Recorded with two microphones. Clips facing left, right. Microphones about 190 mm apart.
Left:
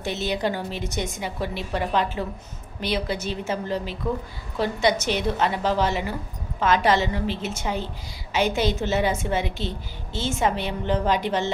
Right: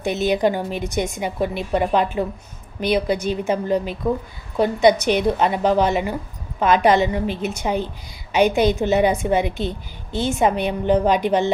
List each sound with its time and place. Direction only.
0.0 s a woman's voice: 15° right (ahead or behind)